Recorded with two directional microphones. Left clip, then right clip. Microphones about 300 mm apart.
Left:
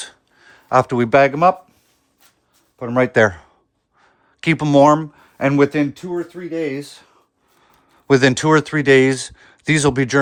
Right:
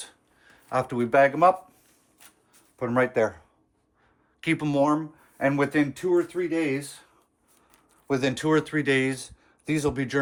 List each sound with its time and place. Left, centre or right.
0.0 s a sound: left
2.7 s speech: left
6.1 s speech: centre
8.1 s speech: left